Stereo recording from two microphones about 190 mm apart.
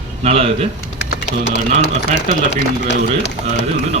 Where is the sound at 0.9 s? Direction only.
65° left (ahead or behind).